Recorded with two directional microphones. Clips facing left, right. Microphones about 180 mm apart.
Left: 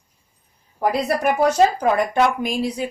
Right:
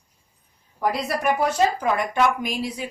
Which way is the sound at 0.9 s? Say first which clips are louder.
Left 3 dB; 30° left (ahead or behind).